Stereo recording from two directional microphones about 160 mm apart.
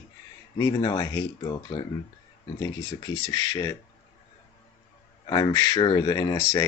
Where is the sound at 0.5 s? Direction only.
25° left (ahead or behind).